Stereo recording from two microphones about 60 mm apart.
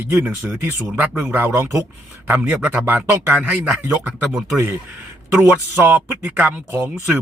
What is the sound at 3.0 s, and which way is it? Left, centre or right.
Speech, right.